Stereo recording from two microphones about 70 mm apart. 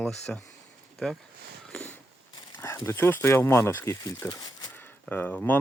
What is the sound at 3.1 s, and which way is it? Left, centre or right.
Speech, left.